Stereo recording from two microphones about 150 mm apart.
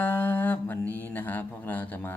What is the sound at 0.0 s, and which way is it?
Music, 15° left (ahead or behind).